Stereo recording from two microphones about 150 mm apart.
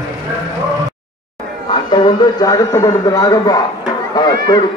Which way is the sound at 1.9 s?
25° left (ahead or behind).